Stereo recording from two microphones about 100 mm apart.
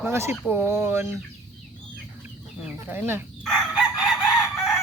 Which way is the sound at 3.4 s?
Centre (ahead or behind).